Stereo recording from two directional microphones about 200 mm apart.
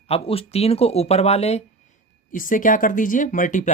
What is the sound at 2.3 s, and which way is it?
Speech, 40° left (ahead or behind).